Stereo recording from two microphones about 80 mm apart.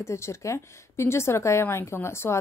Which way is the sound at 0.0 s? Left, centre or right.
Left.